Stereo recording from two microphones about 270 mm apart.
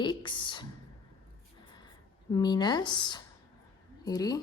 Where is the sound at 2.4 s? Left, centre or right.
Centre.